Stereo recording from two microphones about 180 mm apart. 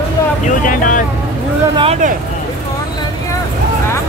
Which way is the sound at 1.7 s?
30° right (ahead or behind).